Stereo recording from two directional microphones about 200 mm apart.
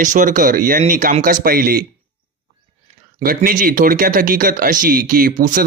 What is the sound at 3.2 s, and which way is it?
Speech, 45° right (ahead or behind).